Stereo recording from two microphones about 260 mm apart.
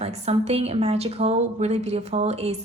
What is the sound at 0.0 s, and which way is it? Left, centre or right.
A woman's voice, right.